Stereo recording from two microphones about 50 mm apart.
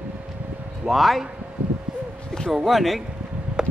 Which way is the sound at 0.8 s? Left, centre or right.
Centre.